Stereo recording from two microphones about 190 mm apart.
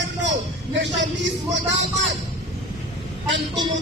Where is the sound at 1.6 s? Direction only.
65° right (ahead or behind).